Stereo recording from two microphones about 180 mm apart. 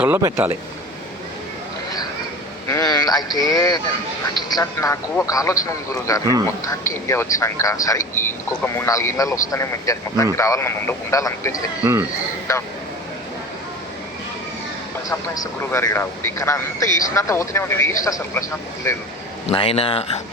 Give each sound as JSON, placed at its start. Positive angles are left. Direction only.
{"t": 0.0, "sound": "speech", "side_deg": -15}
{"t": 2.6, "sound": "a man's voice", "side_deg": 20}
{"t": 11.8, "sound": "speech", "side_deg": -15}
{"t": 15.1, "sound": "a man's voice", "side_deg": 15}
{"t": 19.5, "sound": "speech", "side_deg": 30}